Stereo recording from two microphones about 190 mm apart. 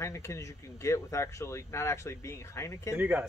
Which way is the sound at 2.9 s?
10° right (ahead or behind).